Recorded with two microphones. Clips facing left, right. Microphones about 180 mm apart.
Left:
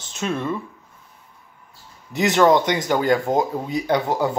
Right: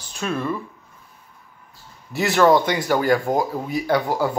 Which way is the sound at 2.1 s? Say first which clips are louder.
Even; 20° left (ahead or behind).